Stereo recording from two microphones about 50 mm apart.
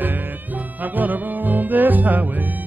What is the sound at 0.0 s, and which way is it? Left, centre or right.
Music, right.